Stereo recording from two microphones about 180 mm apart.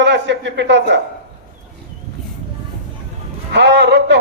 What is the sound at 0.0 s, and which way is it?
Speech, 80° right.